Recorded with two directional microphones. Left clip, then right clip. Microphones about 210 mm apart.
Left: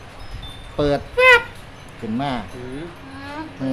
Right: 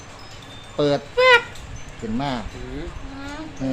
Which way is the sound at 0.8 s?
10° left (ahead or behind).